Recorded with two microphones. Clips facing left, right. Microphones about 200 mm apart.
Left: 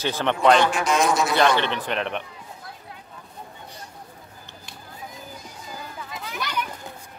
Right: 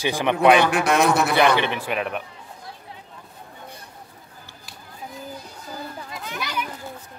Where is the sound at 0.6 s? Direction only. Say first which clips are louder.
Right 2 dB; 60° right (ahead or behind).